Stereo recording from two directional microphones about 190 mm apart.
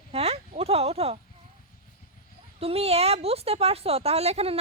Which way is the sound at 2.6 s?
30° right (ahead or behind).